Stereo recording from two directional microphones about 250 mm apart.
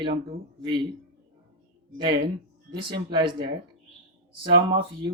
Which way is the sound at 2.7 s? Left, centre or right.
Centre.